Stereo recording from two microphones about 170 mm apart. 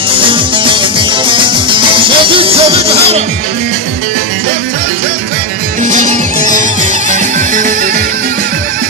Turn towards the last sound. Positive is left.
turn(degrees=-50)  # may be behind; listen again after turning